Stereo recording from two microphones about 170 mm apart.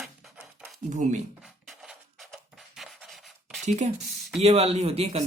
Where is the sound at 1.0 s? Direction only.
45° right (ahead or behind).